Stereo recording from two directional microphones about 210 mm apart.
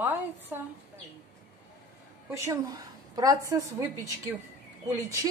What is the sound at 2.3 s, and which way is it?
Speech, 15° right (ahead or behind).